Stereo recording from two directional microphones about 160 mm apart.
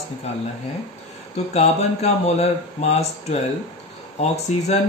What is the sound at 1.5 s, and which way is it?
Speech, 40° left (ahead or behind).